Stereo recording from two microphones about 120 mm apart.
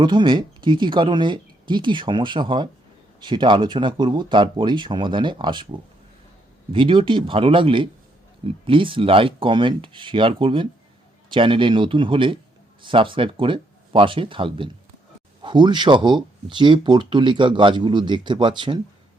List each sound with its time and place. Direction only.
0.0 s speech: 40° right (ahead or behind)
6.7 s speech: 45° right (ahead or behind)